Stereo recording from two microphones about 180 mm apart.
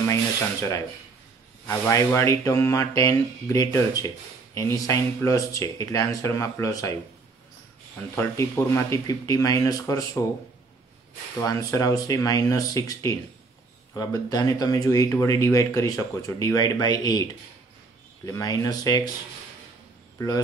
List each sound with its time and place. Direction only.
0.0 s speech: 15° left (ahead or behind)
8.2 s speech: 15° left (ahead or behind)
11.3 s speech: 20° left (ahead or behind)